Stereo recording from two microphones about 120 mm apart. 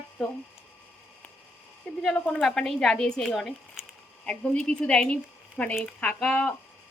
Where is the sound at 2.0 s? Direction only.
5° left (ahead or behind).